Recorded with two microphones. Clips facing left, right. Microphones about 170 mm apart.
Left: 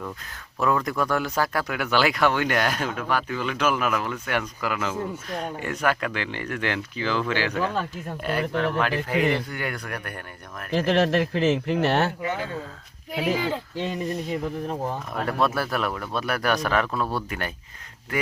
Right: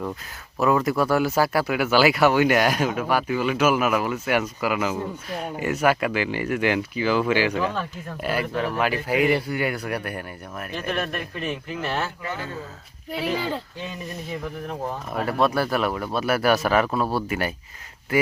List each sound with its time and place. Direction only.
0.6 s speech: 5° right (ahead or behind)
10.7 s speech: 90° left; by 12.1 s 70° left (ahead or behind)
13.1 s speech: 10° left (ahead or behind)
15.1 s speech: 5° right (ahead or behind)